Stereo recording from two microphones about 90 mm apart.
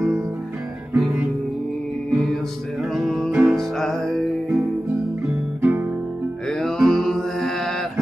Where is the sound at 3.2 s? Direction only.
20° right (ahead or behind).